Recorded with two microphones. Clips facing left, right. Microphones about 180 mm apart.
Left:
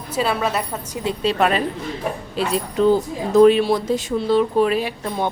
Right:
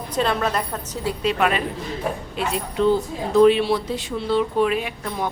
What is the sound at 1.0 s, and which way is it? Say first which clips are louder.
A woman's voice: left 2 dB; 30° left (ahead or behind).